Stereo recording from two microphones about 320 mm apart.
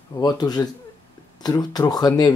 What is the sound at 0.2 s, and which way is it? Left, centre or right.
Speech, centre.